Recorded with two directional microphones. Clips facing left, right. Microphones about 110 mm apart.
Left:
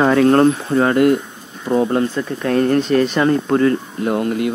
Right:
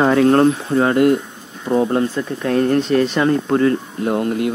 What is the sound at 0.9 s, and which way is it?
Speech, 25° right (ahead or behind).